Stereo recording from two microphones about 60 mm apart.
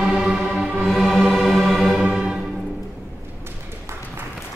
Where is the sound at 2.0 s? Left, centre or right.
Centre.